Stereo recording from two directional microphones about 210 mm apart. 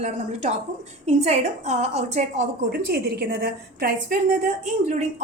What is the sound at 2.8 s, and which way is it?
A woman's voice, 50° right (ahead or behind).